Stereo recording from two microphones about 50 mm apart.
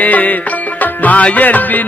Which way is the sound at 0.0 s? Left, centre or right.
Left.